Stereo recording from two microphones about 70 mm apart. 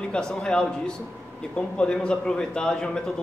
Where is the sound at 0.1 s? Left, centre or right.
Centre.